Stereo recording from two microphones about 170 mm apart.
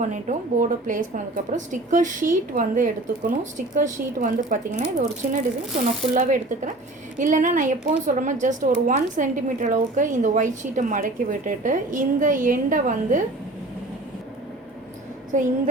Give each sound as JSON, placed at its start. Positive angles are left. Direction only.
{"t": 0.0, "sound": "speech", "side_deg": -45}
{"t": 7.2, "sound": "speech", "side_deg": -50}
{"t": 15.3, "sound": "speech", "side_deg": -50}